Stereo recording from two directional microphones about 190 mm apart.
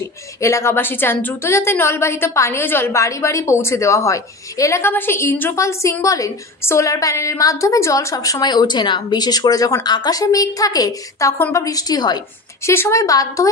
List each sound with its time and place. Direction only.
0.4 s a woman's voice: 15° left (ahead or behind)